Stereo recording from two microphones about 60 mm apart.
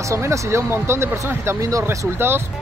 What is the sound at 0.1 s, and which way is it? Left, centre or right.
Speech, right.